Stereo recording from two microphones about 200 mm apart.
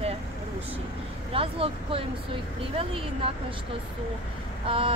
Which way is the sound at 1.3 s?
25° right (ahead or behind).